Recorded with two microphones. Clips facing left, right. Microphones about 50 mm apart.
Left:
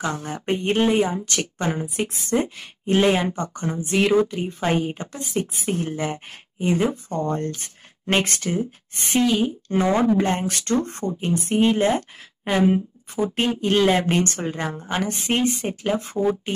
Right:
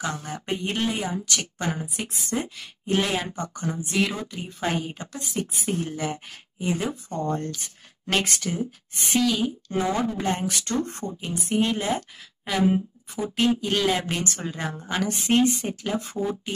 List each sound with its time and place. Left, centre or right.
0.0 s a woman's voice: left
15.0 s speech: left